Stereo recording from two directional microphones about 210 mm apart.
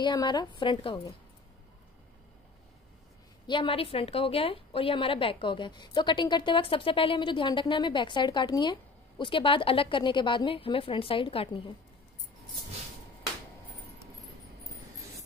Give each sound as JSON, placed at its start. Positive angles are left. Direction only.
{"t": 0.0, "sound": "a woman's voice", "side_deg": 20}
{"t": 3.4, "sound": "a woman's voice", "side_deg": 25}